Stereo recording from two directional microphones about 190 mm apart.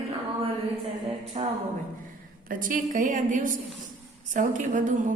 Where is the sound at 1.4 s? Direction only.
35° right (ahead or behind).